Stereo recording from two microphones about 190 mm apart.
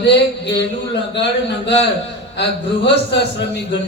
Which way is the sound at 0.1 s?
65° left (ahead or behind).